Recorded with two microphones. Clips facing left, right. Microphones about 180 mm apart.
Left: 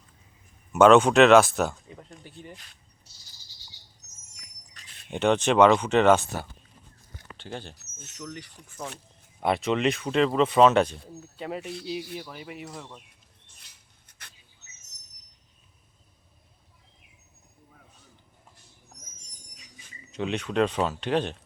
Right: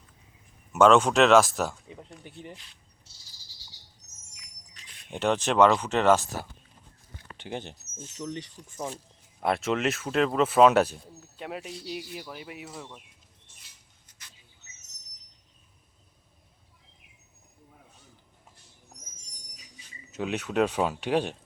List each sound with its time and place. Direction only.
0.7 s speech: centre (ahead or behind)
2.2 s speech: 20° right (ahead or behind)
5.1 s speech: centre (ahead or behind)
7.3 s speech: 15° right (ahead or behind)
7.8 s speech: 65° left (ahead or behind)
8.1 s speech: 25° right (ahead or behind)
9.4 s speech: centre (ahead or behind)
14.1 s a sound: 60° left (ahead or behind)
20.1 s speech: 5° right (ahead or behind)